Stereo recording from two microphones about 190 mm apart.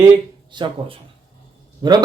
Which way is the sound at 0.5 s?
25° right (ahead or behind).